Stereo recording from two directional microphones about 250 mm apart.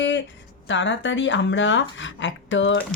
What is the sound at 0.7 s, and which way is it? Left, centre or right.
Speech, left.